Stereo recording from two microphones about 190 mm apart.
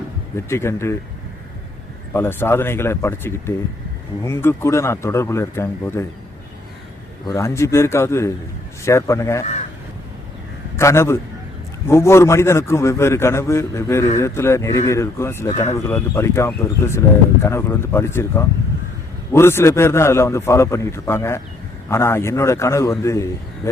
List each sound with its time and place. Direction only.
0.3 s a man's voice: 15° left (ahead or behind)
2.1 s a man's voice: 10° left (ahead or behind)
7.3 s a man's voice: 15° left (ahead or behind)
10.8 s a man's voice: 15° left (ahead or behind)